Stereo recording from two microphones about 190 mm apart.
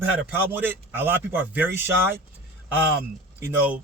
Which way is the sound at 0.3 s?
10° right (ahead or behind).